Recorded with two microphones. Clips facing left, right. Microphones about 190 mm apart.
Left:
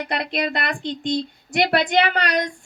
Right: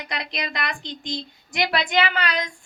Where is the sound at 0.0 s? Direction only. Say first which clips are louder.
Left 7 dB; 55° left (ahead or behind).